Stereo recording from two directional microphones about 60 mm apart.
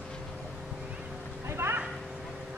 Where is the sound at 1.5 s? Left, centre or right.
Right.